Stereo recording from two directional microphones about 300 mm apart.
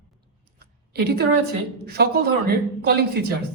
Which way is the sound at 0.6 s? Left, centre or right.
Right.